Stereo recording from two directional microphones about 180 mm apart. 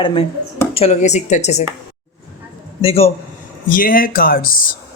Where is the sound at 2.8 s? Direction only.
35° left (ahead or behind).